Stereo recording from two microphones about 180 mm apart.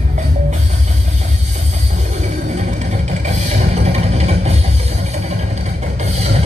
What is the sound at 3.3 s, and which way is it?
Music, 35° right (ahead or behind).